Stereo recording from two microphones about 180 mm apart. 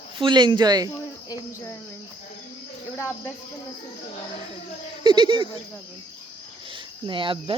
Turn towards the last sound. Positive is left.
turn(degrees=-30)  # may be behind; listen again after turning